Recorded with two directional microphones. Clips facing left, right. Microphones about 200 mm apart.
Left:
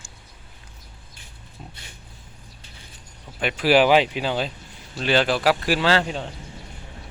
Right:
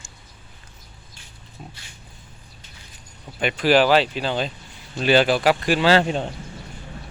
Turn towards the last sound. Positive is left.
turn(degrees=-15)  # may be behind; listen again after turning